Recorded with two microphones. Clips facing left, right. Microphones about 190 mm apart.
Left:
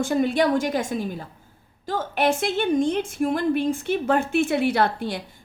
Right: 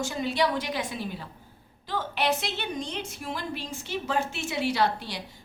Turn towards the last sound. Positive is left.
turn(degrees=55)  # may be behind; listen again after turning